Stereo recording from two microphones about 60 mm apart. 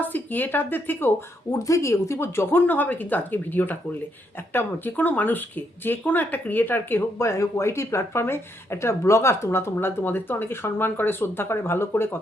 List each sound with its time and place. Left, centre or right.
0.0 s speech: left
1.5 s speech: left
2.6 s speech: left
7.2 s speech: left